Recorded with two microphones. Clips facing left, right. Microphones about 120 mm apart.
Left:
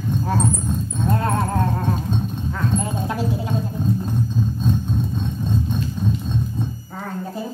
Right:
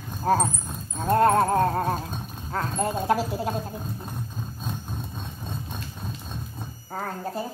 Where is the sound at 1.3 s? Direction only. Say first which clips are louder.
Right 2 dB; 35° right (ahead or behind).